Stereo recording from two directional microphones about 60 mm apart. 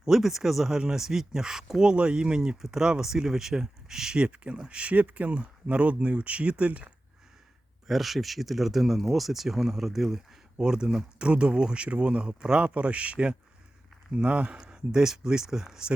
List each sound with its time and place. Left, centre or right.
0.0 s speech: centre; by 6.9 s right
7.9 s speech: centre
14.6 s speech: centre